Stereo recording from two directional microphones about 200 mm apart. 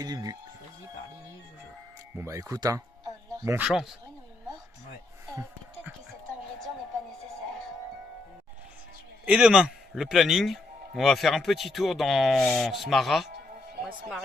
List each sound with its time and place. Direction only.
0.0 s speech: 20° right (ahead or behind)
2.1 s speech: 15° right (ahead or behind)
3.7 s a man's voice: centre (ahead or behind)
9.2 s a man's voice: 5° right (ahead or behind)